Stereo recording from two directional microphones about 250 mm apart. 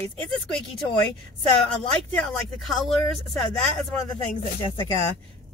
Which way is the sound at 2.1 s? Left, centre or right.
Centre.